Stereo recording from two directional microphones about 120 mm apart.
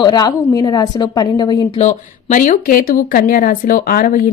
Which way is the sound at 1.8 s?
80° left.